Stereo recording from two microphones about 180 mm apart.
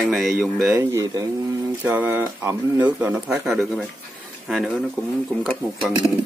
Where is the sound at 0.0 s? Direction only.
Centre (ahead or behind).